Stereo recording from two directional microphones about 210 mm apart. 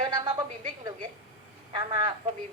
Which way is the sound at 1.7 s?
20° right (ahead or behind).